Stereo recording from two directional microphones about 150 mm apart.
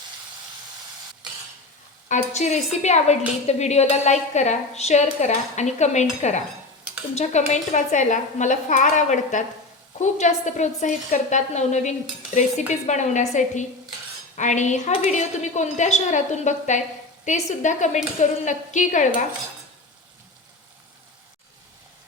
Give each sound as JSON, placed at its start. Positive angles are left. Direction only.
{"t": 2.0, "sound": "a woman's voice", "side_deg": 55}
{"t": 7.2, "sound": "a woman's voice", "side_deg": 50}